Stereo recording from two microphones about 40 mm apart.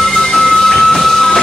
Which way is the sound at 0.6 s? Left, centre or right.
Centre.